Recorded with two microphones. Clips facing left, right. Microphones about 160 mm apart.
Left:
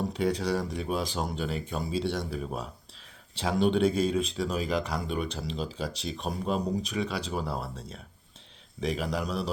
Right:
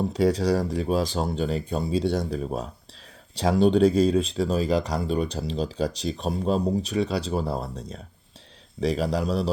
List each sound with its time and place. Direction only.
0.1 s speech: 35° right (ahead or behind)